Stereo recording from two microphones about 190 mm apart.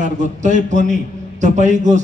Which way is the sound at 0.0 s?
40° right (ahead or behind).